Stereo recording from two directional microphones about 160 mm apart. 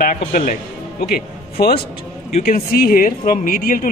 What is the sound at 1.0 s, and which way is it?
A man's voice, 70° left (ahead or behind).